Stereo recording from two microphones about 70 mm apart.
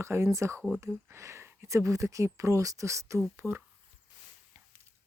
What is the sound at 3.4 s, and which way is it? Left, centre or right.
Speech, right.